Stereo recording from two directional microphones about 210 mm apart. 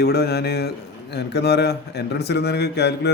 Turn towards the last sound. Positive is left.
turn(degrees=50)  # may be behind; listen again after turning